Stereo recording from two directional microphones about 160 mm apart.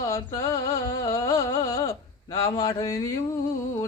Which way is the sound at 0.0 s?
20° left (ahead or behind).